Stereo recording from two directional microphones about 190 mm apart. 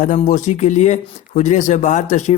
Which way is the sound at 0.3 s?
40° left (ahead or behind).